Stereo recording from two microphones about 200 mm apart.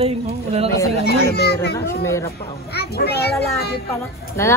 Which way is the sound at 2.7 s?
55° left (ahead or behind).